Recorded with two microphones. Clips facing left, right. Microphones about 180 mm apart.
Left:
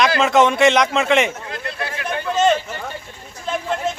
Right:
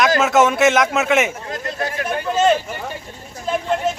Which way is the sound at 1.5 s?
40° right (ahead or behind).